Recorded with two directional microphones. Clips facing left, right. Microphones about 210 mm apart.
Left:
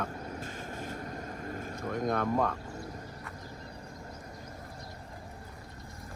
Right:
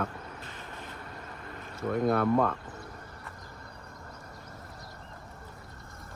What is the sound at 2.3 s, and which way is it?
Speech, 5° left (ahead or behind).